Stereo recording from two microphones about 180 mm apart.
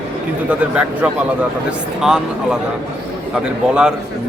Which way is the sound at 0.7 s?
5° right (ahead or behind).